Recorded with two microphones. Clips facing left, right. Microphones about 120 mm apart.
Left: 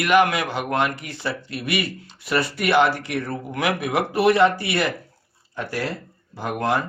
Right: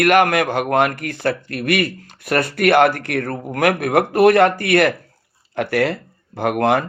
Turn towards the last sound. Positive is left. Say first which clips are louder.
# right 6 dB
turn(degrees=-60)  # may be behind; listen again after turning